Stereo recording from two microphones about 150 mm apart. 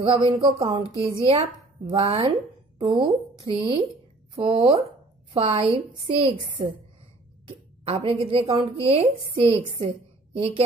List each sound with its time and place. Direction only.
0.0 s a woman's voice: 35° right (ahead or behind)